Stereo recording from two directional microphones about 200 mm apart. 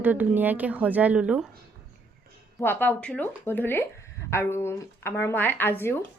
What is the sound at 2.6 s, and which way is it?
Speech, 10° left (ahead or behind).